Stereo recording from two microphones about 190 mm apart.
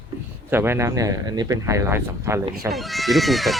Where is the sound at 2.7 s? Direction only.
Centre (ahead or behind).